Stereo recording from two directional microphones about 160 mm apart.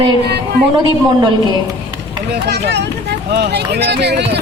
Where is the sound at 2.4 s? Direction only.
90° right.